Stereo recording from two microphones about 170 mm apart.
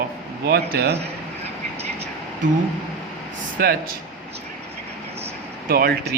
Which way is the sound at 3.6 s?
65° right (ahead or behind).